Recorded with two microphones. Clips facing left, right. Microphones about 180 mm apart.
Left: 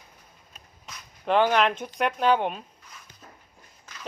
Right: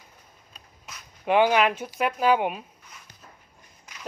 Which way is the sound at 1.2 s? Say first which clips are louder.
Right 1 dB; 10° right (ahead or behind).